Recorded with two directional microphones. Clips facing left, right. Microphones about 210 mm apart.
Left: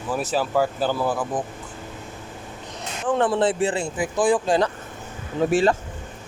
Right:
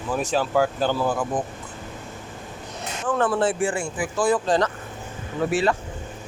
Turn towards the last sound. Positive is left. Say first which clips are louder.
# left 3 dB
turn(degrees=45)  # may be behind; listen again after turning